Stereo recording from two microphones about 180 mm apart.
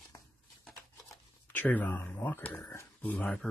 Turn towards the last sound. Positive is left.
turn(degrees=10)  # may be behind; listen again after turning